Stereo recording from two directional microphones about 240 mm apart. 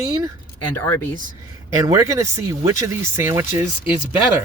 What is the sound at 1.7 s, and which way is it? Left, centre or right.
Speech, centre.